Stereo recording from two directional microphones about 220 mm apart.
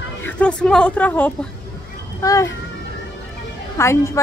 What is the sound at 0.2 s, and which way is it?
Speech, 5° left (ahead or behind).